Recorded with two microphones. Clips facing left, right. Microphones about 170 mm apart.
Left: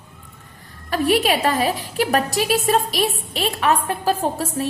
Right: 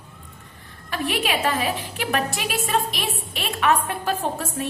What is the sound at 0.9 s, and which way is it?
A woman's voice, 40° left (ahead or behind).